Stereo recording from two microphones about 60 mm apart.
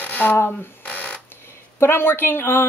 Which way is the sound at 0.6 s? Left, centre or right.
Left.